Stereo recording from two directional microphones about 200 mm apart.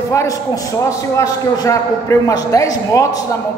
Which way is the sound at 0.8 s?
15° left (ahead or behind).